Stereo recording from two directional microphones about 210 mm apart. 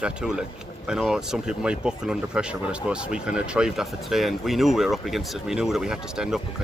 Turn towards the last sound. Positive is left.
turn(degrees=-5)  # may be behind; listen again after turning